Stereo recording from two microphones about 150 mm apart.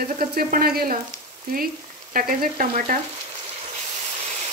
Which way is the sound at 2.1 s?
70° right (ahead or behind).